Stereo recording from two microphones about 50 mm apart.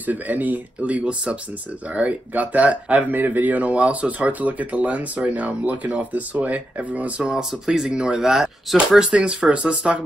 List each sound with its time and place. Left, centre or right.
0.0 s speech: right